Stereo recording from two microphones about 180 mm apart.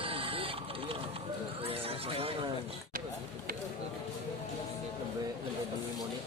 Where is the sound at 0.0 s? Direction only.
30° right (ahead or behind).